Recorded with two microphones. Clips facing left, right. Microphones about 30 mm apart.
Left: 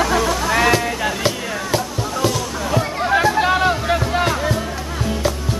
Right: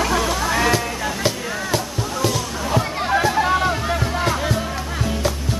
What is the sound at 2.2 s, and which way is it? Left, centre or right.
Music, centre.